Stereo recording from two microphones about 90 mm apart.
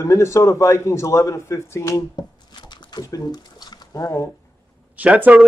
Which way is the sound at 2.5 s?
55° left (ahead or behind).